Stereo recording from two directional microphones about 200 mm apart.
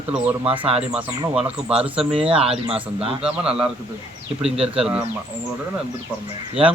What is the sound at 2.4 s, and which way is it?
Speech, 30° right (ahead or behind).